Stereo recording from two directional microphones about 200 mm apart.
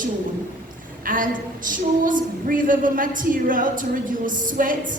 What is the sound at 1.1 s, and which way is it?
A woman's voice, 45° right (ahead or behind).